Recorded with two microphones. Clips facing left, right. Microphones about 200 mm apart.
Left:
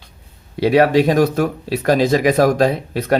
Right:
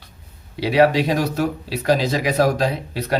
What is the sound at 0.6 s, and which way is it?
Speech, 50° left (ahead or behind).